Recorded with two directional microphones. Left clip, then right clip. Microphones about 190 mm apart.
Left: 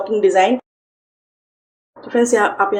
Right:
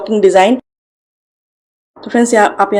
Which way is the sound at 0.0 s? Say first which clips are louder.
Right 5 dB; 40° right (ahead or behind).